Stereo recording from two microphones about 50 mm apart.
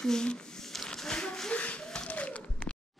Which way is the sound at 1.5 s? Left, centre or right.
Left.